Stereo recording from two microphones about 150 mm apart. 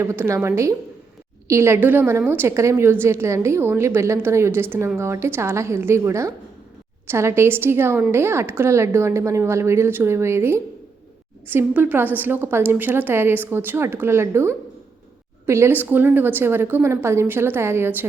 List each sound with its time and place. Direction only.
0.0 s a woman's voice: 20° right (ahead or behind)